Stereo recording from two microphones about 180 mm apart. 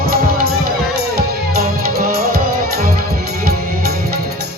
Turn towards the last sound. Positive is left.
turn(degrees=-55)  # may be behind; listen again after turning